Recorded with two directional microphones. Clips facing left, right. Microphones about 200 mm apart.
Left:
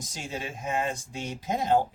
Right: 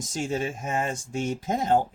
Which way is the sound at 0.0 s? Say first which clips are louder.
Right 8 dB; 50° right (ahead or behind).